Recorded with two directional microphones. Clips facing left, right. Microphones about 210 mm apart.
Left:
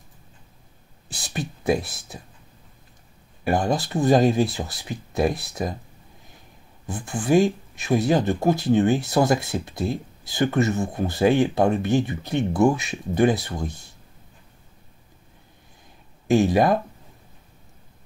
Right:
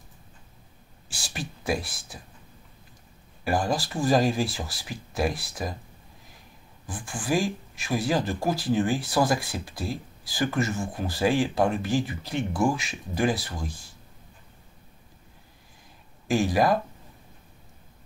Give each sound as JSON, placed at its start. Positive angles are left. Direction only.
{"t": 1.0, "sound": "speech", "side_deg": 20}
{"t": 3.4, "sound": "speech", "side_deg": 25}
{"t": 6.9, "sound": "speech", "side_deg": 25}
{"t": 16.3, "sound": "speech", "side_deg": 25}